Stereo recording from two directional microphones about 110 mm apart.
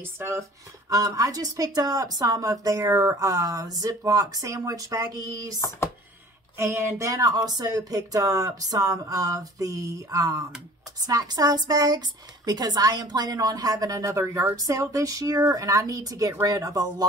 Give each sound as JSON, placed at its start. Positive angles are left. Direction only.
{"t": 0.0, "sound": "speech", "side_deg": -25}